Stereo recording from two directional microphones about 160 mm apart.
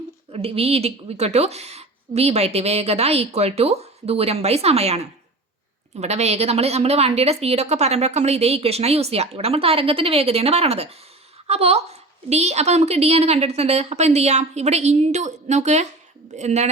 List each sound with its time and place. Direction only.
0.3 s a woman's voice: 40° right (ahead or behind)